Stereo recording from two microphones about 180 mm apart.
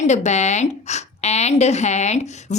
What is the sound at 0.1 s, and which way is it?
A woman's voice, 40° left (ahead or behind).